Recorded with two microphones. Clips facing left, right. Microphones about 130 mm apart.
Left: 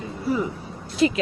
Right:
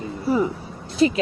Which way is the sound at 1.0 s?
35° right (ahead or behind).